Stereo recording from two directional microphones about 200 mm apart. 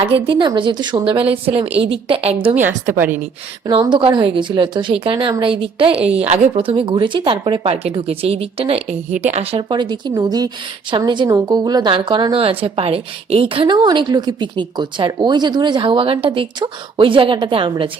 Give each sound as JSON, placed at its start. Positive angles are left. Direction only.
{"t": 0.1, "sound": "a woman's voice", "side_deg": -25}
{"t": 3.7, "sound": "a woman's voice", "side_deg": -20}